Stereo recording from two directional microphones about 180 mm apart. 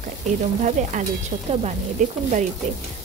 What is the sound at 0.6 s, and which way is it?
Stir, 45° right (ahead or behind).